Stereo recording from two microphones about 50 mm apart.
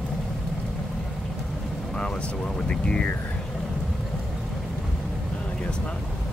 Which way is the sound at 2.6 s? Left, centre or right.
Left.